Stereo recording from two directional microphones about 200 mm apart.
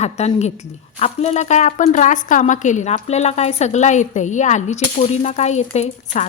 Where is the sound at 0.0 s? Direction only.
35° left (ahead or behind).